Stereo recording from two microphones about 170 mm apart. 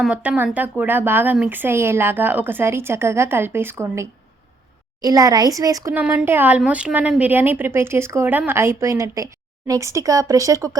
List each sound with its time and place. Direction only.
0.0 s speech: 5° right (ahead or behind)